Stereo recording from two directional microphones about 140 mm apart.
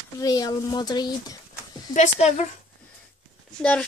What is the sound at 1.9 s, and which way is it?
Speech, 60° left (ahead or behind).